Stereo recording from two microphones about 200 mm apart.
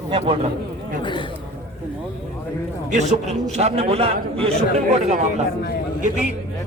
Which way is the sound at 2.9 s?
35° right (ahead or behind).